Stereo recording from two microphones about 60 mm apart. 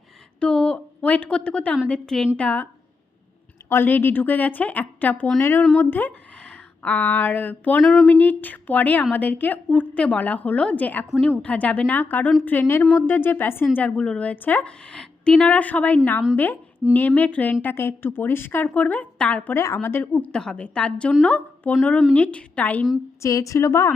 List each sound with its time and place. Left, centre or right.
0.3 s a woman's voice: centre
3.7 s speech: left
5.4 s speech: left
6.4 s a woman's voice: left
9.6 s a woman's voice: centre; by 13.7 s left
13.7 s a woman's voice: left
14.6 s a woman's voice: centre
19.5 s speech: left
20.3 s a woman's voice: centre
23.2 s a woman's voice: left